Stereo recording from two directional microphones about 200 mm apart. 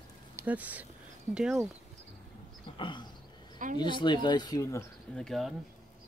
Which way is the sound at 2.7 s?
25° left (ahead or behind).